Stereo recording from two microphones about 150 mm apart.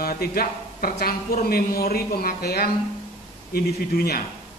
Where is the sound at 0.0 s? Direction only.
90° left.